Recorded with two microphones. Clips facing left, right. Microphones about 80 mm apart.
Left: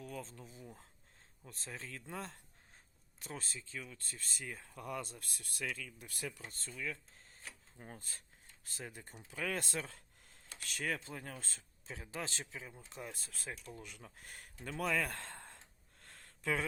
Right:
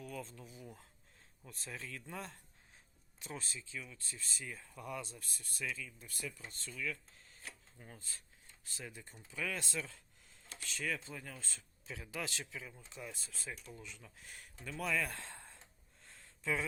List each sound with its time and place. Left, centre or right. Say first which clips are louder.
0.0 s speech: even; left
6.7 s speech: right 1 dB; left
7.9 s speech: left 2 dB; left
11.9 s speech: even; left
12.9 s speech: left 1 dB; left